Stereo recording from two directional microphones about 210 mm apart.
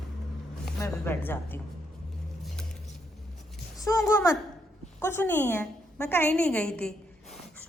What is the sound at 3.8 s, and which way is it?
A woman's voice, 15° left (ahead or behind).